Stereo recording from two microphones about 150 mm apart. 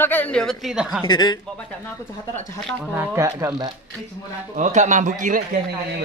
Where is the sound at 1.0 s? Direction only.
30° left (ahead or behind).